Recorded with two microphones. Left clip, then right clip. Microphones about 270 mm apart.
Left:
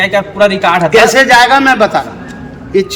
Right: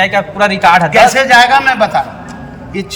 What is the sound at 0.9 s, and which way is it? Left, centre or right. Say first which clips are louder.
A man's voice: left 1 dB; centre.